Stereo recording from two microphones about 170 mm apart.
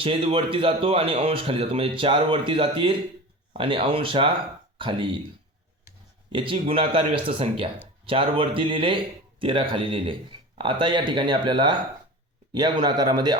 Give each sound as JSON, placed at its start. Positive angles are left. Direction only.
{"t": 0.0, "sound": "speech", "side_deg": -35}
{"t": 6.3, "sound": "speech", "side_deg": -30}